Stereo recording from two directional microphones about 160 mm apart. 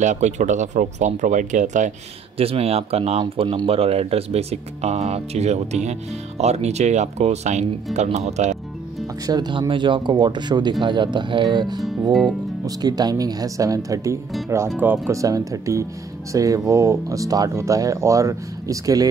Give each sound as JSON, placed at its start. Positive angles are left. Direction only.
{"t": 0.0, "sound": "speech", "side_deg": -50}
{"t": 2.3, "sound": "speech", "side_deg": -35}
{"t": 9.2, "sound": "speech", "side_deg": -25}
{"t": 11.8, "sound": "speech", "side_deg": 0}
{"t": 12.6, "sound": "speech", "side_deg": -25}